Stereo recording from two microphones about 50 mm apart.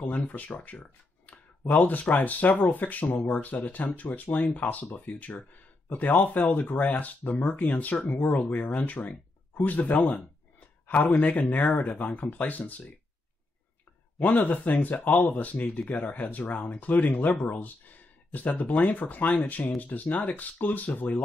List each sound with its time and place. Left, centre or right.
0.1 s speech: left
8.1 s speech: left
14.2 s speech: left